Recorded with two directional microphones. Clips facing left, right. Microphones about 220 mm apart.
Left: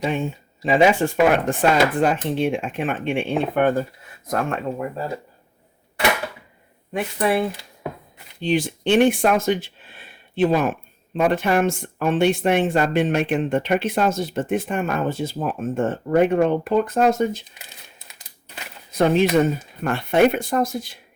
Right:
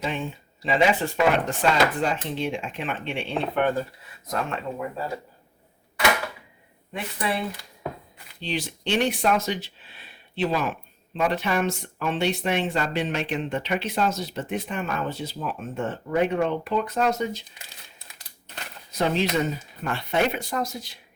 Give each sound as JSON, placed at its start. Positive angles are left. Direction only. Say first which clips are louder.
{"t": 0.1, "sound": "speech", "louder": "left 6 dB", "side_deg": 45}
{"t": 6.9, "sound": "speech", "louder": "left 8 dB", "side_deg": 50}
{"t": 18.9, "sound": "speech", "louder": "left 7 dB", "side_deg": 55}